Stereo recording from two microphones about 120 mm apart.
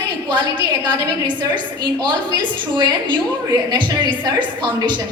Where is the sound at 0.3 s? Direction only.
40° right (ahead or behind).